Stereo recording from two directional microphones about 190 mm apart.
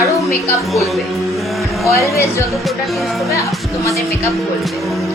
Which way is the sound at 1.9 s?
15° left (ahead or behind).